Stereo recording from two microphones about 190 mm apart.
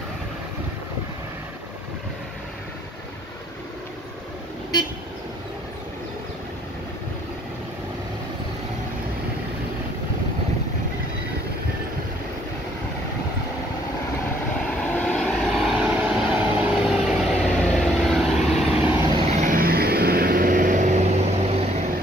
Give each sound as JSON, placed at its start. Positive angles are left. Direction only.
{"t": 15.0, "sound": "vehicle", "side_deg": 5}
{"t": 19.3, "sound": "vehicle", "side_deg": -45}